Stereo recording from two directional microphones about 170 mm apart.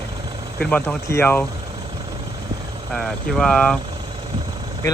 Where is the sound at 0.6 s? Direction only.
10° left (ahead or behind).